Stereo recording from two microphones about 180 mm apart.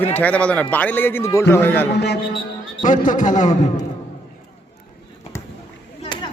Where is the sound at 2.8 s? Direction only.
45° left (ahead or behind).